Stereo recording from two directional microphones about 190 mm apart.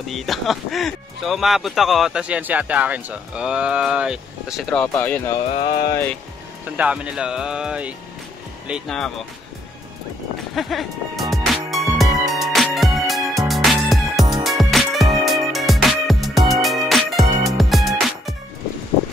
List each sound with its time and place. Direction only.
0.1 s speech: centre (ahead or behind)
5.5 s a sound: 30° left (ahead or behind)
6.6 s speech: 5° right (ahead or behind)
10.5 s speech: centre (ahead or behind)
11.4 s music: centre (ahead or behind)